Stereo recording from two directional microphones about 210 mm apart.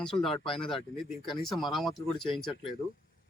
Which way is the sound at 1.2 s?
Centre (ahead or behind).